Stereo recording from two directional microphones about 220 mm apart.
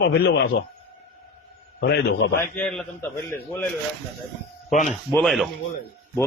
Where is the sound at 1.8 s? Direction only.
50° left (ahead or behind).